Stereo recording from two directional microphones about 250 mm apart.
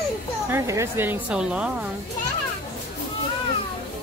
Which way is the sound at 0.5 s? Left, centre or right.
Centre.